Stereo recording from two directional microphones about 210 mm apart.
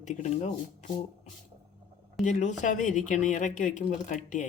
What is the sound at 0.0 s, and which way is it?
Speech, 35° left (ahead or behind).